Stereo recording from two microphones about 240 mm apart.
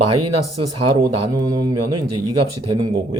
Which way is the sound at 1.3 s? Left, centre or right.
Centre.